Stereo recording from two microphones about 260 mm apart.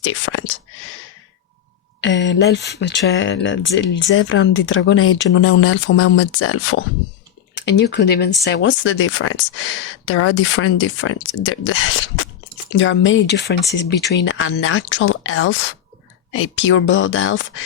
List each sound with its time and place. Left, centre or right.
0.0 s whispering: left
2.0 s speech: left
7.5 s speech: left